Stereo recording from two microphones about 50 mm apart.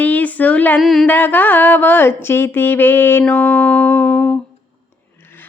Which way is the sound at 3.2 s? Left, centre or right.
Left.